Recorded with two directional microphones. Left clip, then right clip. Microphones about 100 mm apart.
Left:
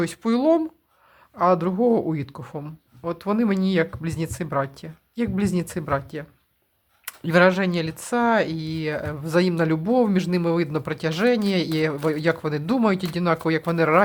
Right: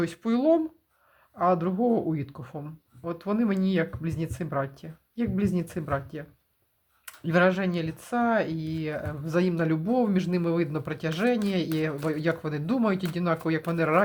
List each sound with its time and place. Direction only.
0.0 s speech: 35° left (ahead or behind)